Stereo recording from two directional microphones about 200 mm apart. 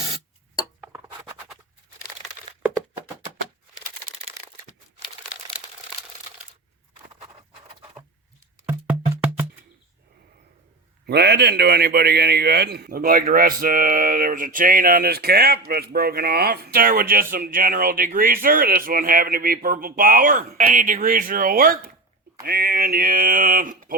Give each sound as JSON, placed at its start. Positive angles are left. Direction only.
{"t": 8.6, "sound": "music", "side_deg": -10}
{"t": 11.0, "sound": "a man's voice", "side_deg": -55}